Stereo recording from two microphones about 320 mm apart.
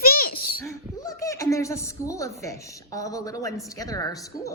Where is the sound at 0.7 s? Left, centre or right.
Centre.